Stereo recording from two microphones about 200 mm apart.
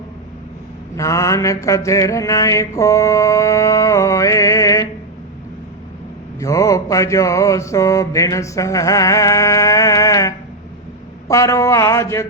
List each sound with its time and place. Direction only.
0.9 s mantra: 15° left (ahead or behind)
6.4 s mantra: 15° left (ahead or behind)